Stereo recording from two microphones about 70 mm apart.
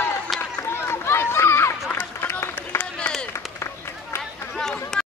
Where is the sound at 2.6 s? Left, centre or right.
Left.